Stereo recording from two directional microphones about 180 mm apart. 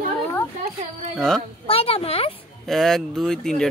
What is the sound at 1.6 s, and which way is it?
Speech, 30° left (ahead or behind).